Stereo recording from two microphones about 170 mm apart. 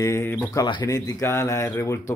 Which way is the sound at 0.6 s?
25° left (ahead or behind).